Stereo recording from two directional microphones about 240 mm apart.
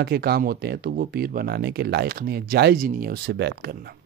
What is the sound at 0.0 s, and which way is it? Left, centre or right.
Speech, right.